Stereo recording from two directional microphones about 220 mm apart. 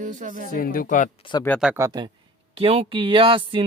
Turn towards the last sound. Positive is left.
turn(degrees=-20)  # may be behind; listen again after turning